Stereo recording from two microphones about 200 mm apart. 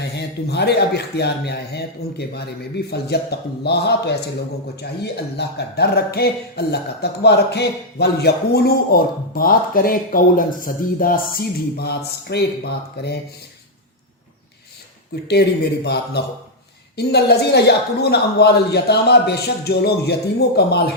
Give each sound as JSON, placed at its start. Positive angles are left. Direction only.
{"t": 0.2, "sound": "a man's voice", "side_deg": 55}
{"t": 15.1, "sound": "a man's voice", "side_deg": 55}